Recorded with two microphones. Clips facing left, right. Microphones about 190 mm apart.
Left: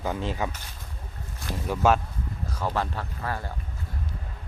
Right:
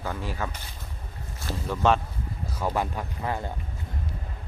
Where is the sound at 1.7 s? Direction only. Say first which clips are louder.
Left 1 dB; 10° left (ahead or behind).